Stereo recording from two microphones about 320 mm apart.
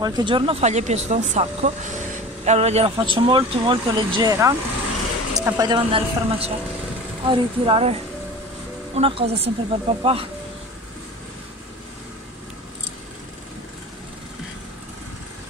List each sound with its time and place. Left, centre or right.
0.0 s speech: centre